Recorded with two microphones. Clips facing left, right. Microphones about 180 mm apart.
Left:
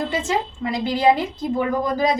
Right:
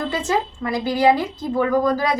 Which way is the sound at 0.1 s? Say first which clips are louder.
Right 1 dB; 20° left (ahead or behind).